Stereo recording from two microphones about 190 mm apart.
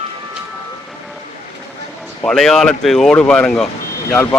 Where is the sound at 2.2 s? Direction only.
5° left (ahead or behind).